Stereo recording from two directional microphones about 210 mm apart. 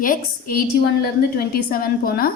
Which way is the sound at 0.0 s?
40° left (ahead or behind).